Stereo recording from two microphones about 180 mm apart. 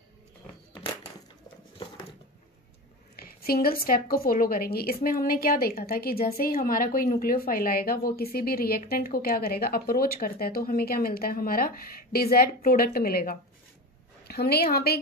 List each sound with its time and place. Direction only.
3.2 s a woman's voice: 55° left (ahead or behind)